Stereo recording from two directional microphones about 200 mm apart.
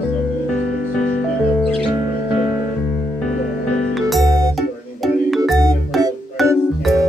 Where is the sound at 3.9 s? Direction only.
Centre (ahead or behind).